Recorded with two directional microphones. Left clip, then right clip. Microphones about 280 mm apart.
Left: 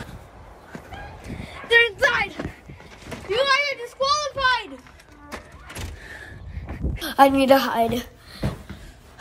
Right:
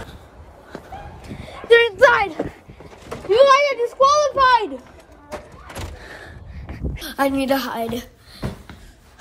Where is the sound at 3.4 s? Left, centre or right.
Right.